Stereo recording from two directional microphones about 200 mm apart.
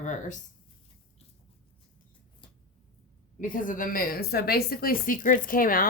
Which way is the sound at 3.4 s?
40° left (ahead or behind).